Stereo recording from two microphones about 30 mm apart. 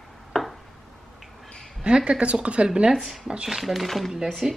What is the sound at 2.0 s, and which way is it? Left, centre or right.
Speech, right.